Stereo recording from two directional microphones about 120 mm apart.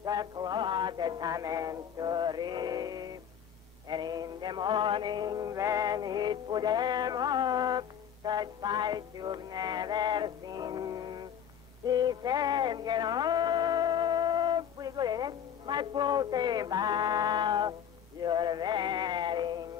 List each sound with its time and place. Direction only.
0.0 s music: 30° right (ahead or behind)
3.9 s male singing: 35° right (ahead or behind)
11.8 s music: 35° right (ahead or behind)
18.2 s synthetic singing: 35° right (ahead or behind)